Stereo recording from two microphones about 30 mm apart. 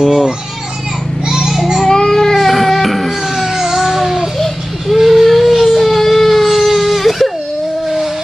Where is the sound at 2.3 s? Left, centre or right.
Centre.